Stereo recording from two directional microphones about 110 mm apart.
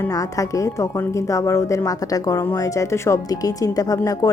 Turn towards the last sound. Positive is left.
turn(degrees=35)  # may be behind; listen again after turning